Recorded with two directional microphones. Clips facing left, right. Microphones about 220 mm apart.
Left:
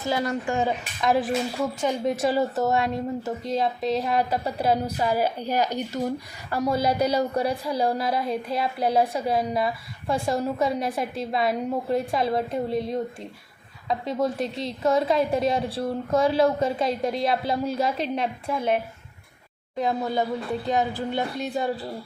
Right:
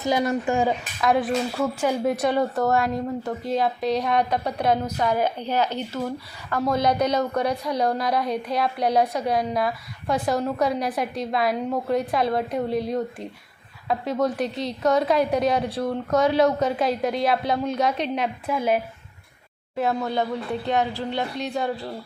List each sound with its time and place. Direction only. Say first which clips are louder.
0.0 s speech: right 3 dB; 20° right (ahead or behind)
1.0 s a woman's voice: right 1 dB; centre (ahead or behind)
2.1 s a woman's voice: right 1 dB; 5° left (ahead or behind)
7.4 s a woman's voice: right 1 dB; 30° left (ahead or behind)
7.8 s a woman's voice: right 1 dB; 5° left (ahead or behind)
20.1 s a woman's voice: even; centre (ahead or behind)